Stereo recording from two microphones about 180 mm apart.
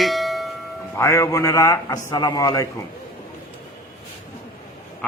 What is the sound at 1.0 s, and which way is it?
A man's voice, 15° left (ahead or behind).